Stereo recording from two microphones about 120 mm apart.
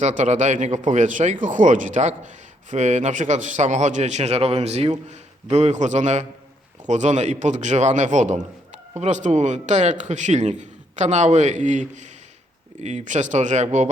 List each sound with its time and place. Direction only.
0.0 s speech: 90° right
12.8 s speech: 75° right (ahead or behind)